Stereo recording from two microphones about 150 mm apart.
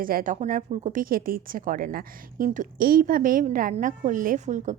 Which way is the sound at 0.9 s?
70° right (ahead or behind).